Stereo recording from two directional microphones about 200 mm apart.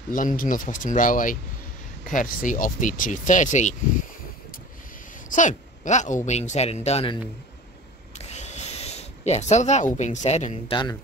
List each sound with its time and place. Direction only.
0.1 s speech: 40° left (ahead or behind)
5.3 s speech: 40° left (ahead or behind)
8.2 s a sound: 35° left (ahead or behind)
9.9 s speech: 35° left (ahead or behind)